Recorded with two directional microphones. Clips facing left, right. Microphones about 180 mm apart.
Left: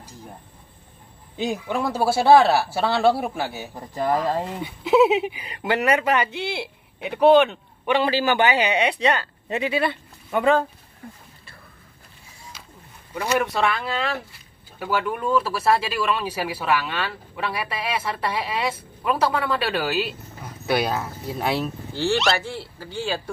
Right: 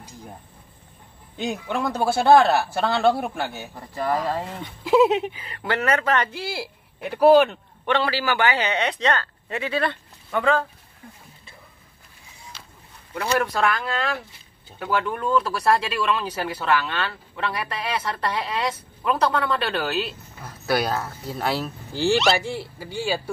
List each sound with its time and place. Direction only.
1.4 s speech: 5° left (ahead or behind)
3.9 s a man's voice: 15° left (ahead or behind)
5.4 s speech: 15° left (ahead or behind); by 7.9 s centre (ahead or behind)
7.9 s a man's voice: 20° left (ahead or behind)
13.1 s speech: 5° left (ahead or behind)
21.9 s speech: 15° right (ahead or behind)